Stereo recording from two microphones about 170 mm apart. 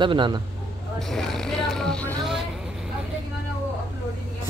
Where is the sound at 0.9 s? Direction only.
Centre (ahead or behind).